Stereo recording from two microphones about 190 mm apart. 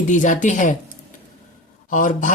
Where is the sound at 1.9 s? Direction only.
45° left (ahead or behind).